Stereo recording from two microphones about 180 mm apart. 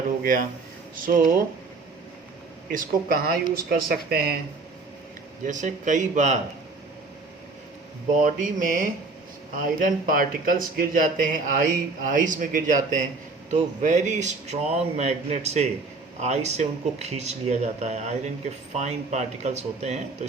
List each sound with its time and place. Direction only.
0.2 s speech: 50° right (ahead or behind)
2.6 s speech: 50° right (ahead or behind)
5.5 s speech: 45° right (ahead or behind)
8.2 s speech: 45° right (ahead or behind)